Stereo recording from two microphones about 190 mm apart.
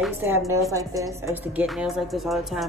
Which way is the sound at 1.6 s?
Centre (ahead or behind).